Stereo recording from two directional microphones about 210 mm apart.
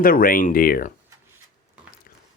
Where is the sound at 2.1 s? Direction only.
45° left (ahead or behind).